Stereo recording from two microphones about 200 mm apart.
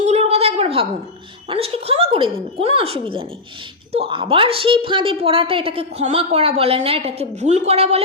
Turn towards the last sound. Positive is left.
turn(degrees=-30)  # may be behind; listen again after turning